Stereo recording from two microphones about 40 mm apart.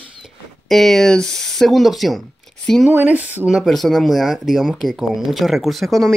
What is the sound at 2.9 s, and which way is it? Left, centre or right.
Speech, right.